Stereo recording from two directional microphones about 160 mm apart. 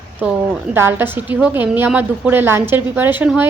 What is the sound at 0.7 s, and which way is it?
A woman's voice, 15° right (ahead or behind).